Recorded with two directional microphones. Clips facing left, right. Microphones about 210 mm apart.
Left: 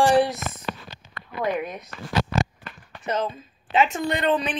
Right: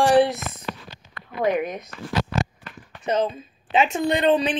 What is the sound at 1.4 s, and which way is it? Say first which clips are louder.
Speech: right 4 dB; 20° right (ahead or behind).